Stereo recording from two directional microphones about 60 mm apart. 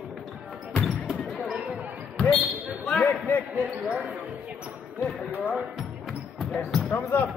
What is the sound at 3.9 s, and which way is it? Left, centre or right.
Basketball bounce, right.